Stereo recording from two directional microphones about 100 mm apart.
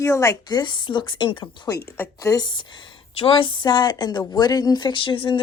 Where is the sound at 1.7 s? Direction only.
40° left (ahead or behind).